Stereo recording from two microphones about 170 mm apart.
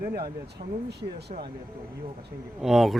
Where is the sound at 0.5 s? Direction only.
75° right (ahead or behind).